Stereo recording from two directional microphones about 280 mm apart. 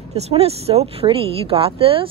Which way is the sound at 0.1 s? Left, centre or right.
Right.